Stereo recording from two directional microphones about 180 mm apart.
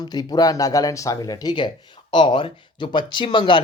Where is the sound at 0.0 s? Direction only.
20° left (ahead or behind).